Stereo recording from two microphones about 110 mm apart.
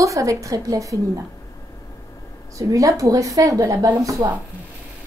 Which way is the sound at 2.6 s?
30° right (ahead or behind).